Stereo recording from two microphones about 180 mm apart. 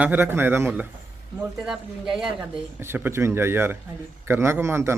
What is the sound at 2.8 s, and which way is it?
A man's voice, 15° right (ahead or behind).